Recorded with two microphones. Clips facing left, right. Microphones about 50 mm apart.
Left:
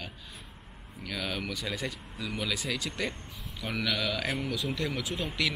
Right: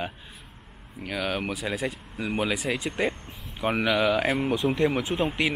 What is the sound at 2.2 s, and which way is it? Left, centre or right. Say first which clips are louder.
Speech: right 7 dB; right.